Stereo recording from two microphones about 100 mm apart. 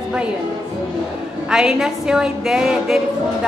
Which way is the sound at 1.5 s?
5° right (ahead or behind).